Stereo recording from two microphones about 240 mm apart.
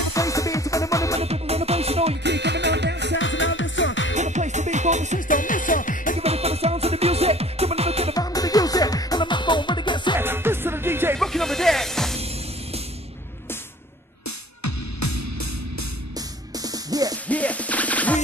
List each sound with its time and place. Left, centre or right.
0.1 s music: centre
1.2 s music: right
2.2 s music: right
3.2 s music: left
4.1 s music: right
5.3 s music: left
6.1 s music: right
8.1 s music: centre
10.1 s music: centre
11.1 s music: centre
16.2 s music: centre
17.3 s music: centre